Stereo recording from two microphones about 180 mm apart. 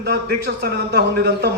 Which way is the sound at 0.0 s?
60° right (ahead or behind).